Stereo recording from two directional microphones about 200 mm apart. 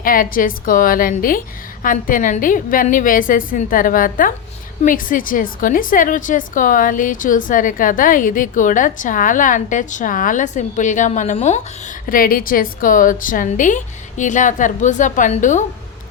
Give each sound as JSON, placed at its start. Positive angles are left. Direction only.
{"t": 0.0, "sound": "a woman's voice", "side_deg": 45}
{"t": 12.0, "sound": "a woman's voice", "side_deg": 45}